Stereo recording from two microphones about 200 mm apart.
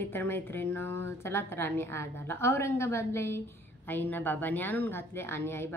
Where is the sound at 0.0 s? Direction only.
10° left (ahead or behind).